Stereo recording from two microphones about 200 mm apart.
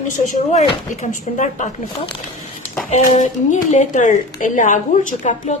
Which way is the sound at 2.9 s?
35° left (ahead or behind).